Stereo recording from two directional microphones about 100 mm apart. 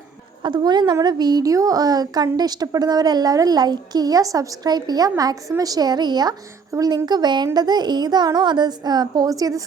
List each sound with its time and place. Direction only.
0.4 s a woman's voice: 50° right (ahead or behind)